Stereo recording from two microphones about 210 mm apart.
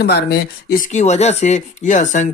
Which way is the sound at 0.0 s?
50° left (ahead or behind).